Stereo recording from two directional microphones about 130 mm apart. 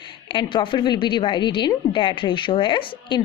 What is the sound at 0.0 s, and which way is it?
A woman's voice, 40° left (ahead or behind).